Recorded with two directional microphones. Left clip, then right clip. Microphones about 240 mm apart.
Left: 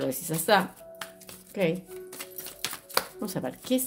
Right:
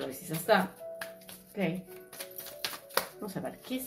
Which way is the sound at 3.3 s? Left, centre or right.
Left.